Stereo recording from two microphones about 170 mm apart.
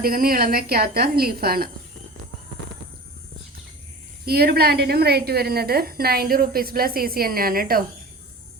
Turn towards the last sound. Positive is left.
turn(degrees=-60)  # may be behind; listen again after turning